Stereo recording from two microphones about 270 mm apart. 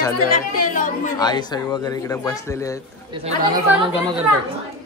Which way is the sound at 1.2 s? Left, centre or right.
Centre.